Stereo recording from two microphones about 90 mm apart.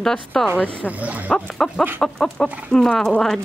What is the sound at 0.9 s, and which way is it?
Speech, 15° right (ahead or behind).